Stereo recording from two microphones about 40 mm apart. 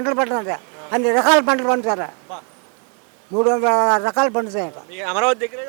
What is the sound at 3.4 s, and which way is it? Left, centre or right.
A man's voice, centre.